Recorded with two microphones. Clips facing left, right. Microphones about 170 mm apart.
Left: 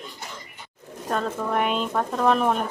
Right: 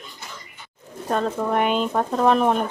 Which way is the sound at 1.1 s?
20° right (ahead or behind).